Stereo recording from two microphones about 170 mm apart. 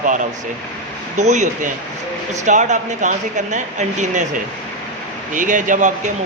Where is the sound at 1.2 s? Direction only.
45° right (ahead or behind).